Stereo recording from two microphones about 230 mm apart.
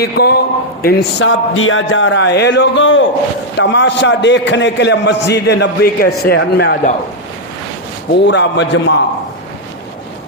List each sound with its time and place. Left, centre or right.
0.0 s a man's voice: left
8.2 s a man's voice: left